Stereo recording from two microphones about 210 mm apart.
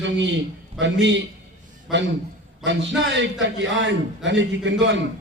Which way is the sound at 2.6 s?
60° right (ahead or behind).